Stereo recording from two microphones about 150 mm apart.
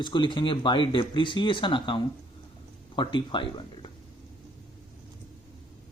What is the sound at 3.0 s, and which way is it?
Speech, 35° left (ahead or behind).